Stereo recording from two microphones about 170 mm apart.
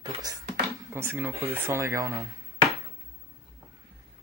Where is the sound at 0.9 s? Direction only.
15° right (ahead or behind).